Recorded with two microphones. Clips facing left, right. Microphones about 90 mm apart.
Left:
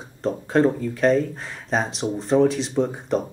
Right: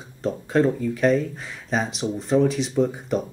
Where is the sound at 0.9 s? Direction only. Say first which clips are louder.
Left 1 dB; 40° left (ahead or behind).